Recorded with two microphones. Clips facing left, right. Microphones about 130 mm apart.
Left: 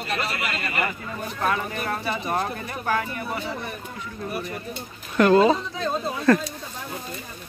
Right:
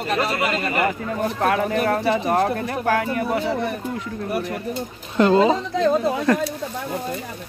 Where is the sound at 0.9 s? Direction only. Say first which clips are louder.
Right 9 dB; 70° right (ahead or behind).